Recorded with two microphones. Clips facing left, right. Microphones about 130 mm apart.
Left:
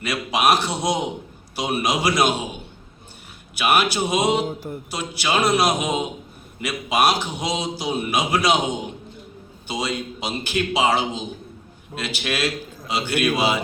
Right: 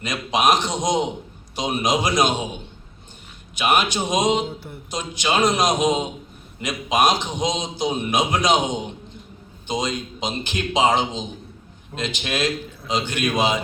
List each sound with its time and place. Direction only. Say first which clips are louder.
0.0 s a man's voice: even; 5° left (ahead or behind)
3.5 s a man's voice: even; 5° left (ahead or behind)
4.4 s speech: left 4 dB; 40° left (ahead or behind)
4.9 s a man's voice: right 1 dB; 10° left (ahead or behind)